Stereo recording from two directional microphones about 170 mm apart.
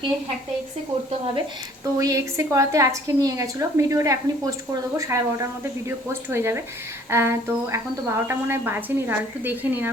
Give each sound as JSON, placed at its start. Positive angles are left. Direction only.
{"t": 1.8, "sound": "a woman's voice", "side_deg": -20}
{"t": 6.3, "sound": "speech", "side_deg": -15}